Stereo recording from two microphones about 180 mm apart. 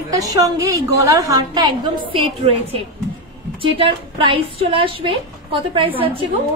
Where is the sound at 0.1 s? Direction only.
20° right (ahead or behind).